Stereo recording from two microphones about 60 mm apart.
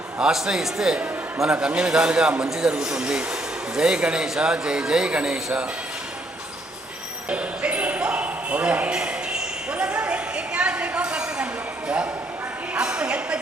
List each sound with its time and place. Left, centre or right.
0.2 s speech: centre
7.3 s basketball bounce: centre
8.9 s a sound: centre